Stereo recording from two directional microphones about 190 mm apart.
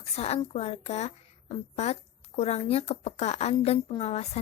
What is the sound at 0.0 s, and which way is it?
A woman's voice, 35° left (ahead or behind).